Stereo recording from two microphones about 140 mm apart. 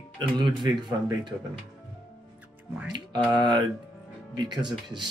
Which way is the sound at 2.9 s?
35° right (ahead or behind).